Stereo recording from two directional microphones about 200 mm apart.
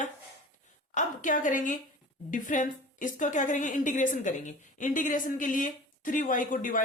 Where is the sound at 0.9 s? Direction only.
40° left (ahead or behind).